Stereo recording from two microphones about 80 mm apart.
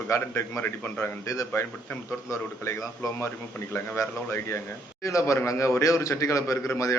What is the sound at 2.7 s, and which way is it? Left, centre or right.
A man's voice, left.